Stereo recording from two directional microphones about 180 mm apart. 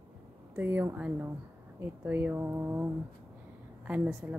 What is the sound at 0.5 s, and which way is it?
Speech, 10° right (ahead or behind).